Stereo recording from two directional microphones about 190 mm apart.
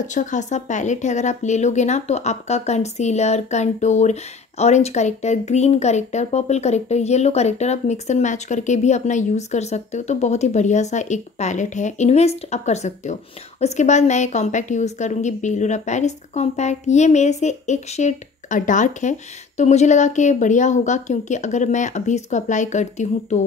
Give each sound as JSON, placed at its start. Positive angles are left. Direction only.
{"t": 0.0, "sound": "speech", "side_deg": 40}